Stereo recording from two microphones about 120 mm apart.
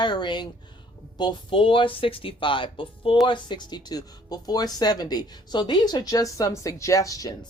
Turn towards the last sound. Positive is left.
turn(degrees=30)  # may be behind; listen again after turning